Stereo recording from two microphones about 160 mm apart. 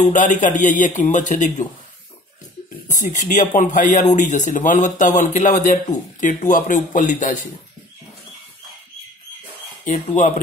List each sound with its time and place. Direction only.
0.1 s speech: 55° left (ahead or behind)
2.9 s speech: 50° left (ahead or behind)
9.8 s speech: 50° left (ahead or behind)